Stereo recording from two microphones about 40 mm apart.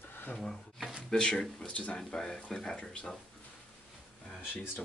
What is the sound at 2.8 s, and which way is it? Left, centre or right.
Speech, left.